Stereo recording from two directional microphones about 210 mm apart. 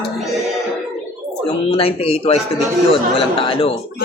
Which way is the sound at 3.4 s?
25° left (ahead or behind).